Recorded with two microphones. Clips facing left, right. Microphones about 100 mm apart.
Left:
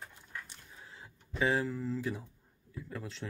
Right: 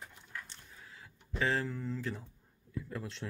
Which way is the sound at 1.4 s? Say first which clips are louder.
Left 2 dB; 10° left (ahead or behind).